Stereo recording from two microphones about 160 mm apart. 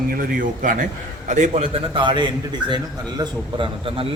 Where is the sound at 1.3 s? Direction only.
45° right (ahead or behind).